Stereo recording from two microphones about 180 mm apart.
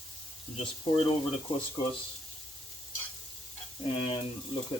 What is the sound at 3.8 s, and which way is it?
Speech, 30° left (ahead or behind).